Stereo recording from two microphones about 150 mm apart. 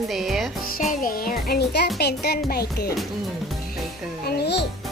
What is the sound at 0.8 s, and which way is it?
Music, 65° left (ahead or behind).